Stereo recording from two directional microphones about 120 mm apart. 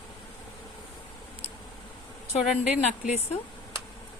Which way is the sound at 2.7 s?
70° left (ahead or behind).